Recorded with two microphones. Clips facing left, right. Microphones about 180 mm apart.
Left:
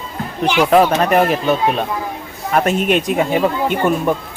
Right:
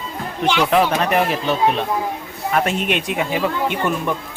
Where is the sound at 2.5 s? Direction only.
45° left (ahead or behind).